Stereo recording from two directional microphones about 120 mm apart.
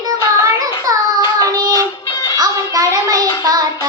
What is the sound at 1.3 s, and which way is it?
Child singing, 30° right (ahead or behind).